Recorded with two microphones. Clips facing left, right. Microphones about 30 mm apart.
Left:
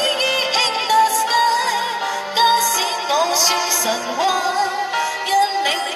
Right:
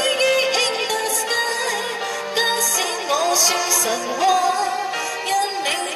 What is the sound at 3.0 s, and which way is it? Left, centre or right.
Music, left.